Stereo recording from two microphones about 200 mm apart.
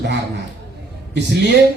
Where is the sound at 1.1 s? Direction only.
55° right (ahead or behind).